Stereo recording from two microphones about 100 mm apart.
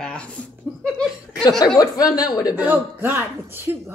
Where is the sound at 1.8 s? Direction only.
40° left (ahead or behind).